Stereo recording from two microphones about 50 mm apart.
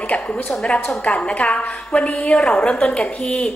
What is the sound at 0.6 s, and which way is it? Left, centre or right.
A woman's voice, centre.